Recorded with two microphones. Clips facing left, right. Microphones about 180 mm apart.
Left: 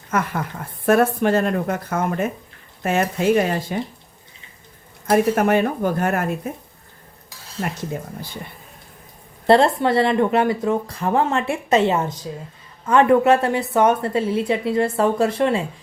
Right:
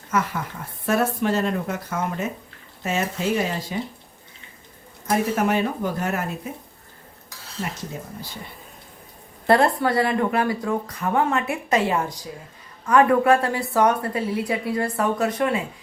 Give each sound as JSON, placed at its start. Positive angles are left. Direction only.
{"t": 0.1, "sound": "speech", "side_deg": 55}
{"t": 5.0, "sound": "speech", "side_deg": 55}
{"t": 7.6, "sound": "speech", "side_deg": 50}
{"t": 9.5, "sound": "speech", "side_deg": 25}